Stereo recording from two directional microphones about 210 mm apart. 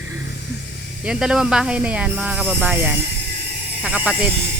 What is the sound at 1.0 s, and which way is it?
Speech, 5° right (ahead or behind).